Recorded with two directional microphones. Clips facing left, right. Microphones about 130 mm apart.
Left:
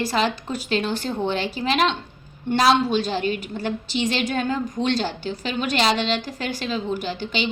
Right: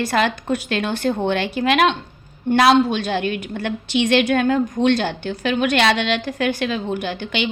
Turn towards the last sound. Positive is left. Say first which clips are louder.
# right 2 dB
turn(degrees=-60)  # may be behind; listen again after turning